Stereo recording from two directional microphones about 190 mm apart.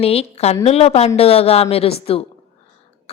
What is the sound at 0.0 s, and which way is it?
A woman's voice, 30° left (ahead or behind).